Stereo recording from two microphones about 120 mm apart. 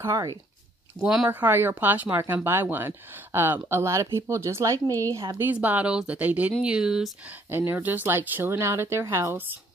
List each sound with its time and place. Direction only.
0.1 s speech: 30° right (ahead or behind)
1.0 s speech: 5° right (ahead or behind)
7.5 s speech: 15° right (ahead or behind)